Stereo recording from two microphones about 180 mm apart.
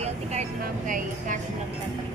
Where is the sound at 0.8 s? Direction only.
45° right (ahead or behind).